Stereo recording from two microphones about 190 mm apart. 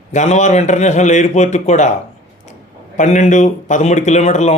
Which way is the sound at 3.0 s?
40° left (ahead or behind).